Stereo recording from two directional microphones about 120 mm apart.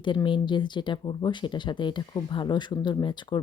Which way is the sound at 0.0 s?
40° left (ahead or behind).